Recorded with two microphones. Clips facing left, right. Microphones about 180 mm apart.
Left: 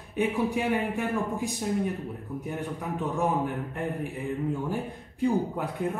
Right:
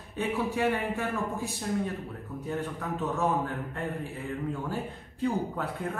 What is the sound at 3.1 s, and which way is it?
Speech, 15° left (ahead or behind).